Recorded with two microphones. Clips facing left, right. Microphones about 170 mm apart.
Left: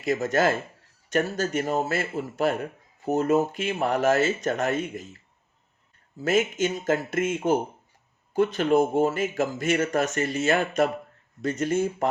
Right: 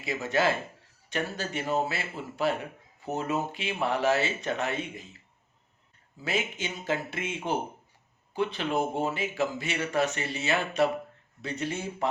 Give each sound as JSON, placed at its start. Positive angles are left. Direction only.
{"t": 0.0, "sound": "speech", "side_deg": 45}
{"t": 6.2, "sound": "speech", "side_deg": 45}